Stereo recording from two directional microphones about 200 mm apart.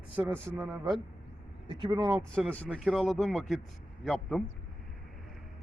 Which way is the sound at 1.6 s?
20° right (ahead or behind).